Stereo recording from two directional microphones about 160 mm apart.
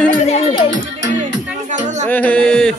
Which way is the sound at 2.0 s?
10° left (ahead or behind).